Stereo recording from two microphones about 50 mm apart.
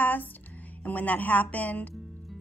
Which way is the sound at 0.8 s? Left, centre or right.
Left.